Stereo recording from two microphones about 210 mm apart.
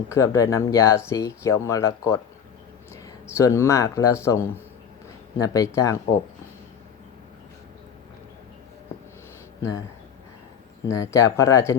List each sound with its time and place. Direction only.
0.1 s speech: 15° left (ahead or behind)
10.8 s speech: 15° left (ahead or behind)